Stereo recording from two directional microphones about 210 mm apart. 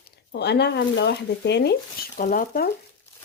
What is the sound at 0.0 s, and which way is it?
Speech, 50° left (ahead or behind).